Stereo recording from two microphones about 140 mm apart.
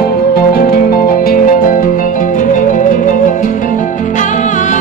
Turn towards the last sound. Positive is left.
turn(degrees=70)  # may be behind; listen again after turning